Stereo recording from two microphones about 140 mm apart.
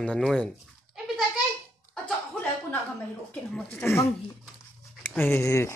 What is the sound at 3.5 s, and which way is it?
Speech, 15° left (ahead or behind).